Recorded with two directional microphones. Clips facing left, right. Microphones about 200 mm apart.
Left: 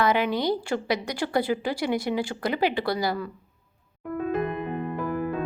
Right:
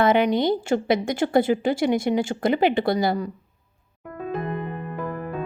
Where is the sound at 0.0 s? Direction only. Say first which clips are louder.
Right 5 dB; 20° right (ahead or behind).